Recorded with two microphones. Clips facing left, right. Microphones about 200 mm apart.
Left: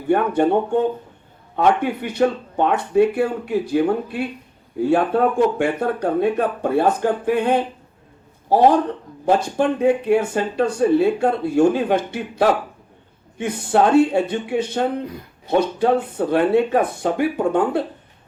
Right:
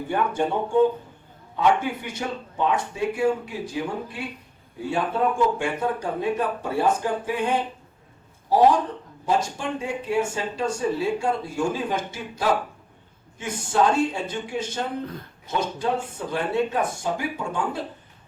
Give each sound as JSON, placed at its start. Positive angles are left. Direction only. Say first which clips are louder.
{"t": 0.1, "sound": "speech", "louder": "left 8 dB", "side_deg": 60}
{"t": 9.2, "sound": "speech", "louder": "left 7 dB", "side_deg": 60}
{"t": 15.0, "sound": "speech", "louder": "left 3 dB", "side_deg": 10}
{"t": 15.4, "sound": "speech", "louder": "left 8 dB", "side_deg": 65}